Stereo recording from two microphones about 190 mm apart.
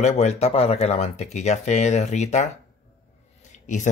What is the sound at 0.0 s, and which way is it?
Speech, 35° left (ahead or behind).